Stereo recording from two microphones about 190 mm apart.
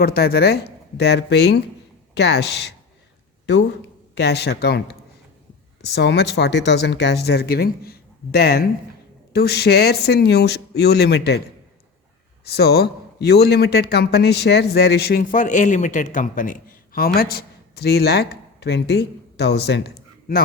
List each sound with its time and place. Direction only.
0.0 s speech: 55° left (ahead or behind)
4.2 s speech: 60° left (ahead or behind)
12.5 s speech: 55° left (ahead or behind)